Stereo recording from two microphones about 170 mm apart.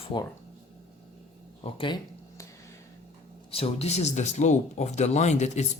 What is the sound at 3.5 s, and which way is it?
Speech, 35° left (ahead or behind).